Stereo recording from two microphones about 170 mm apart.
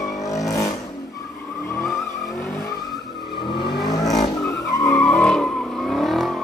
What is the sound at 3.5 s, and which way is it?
Vehicle, 25° left (ahead or behind).